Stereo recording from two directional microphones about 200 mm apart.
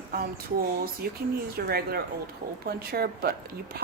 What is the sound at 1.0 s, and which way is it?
Speech, 50° right (ahead or behind).